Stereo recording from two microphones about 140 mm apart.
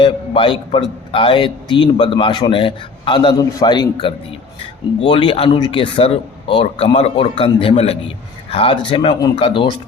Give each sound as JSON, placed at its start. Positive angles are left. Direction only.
{"t": 0.0, "sound": "a man's voice", "side_deg": 35}